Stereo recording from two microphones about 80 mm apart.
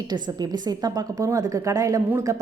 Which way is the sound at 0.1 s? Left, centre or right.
Right.